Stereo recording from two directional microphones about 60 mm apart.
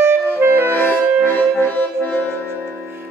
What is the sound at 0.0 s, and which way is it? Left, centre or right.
Music, right.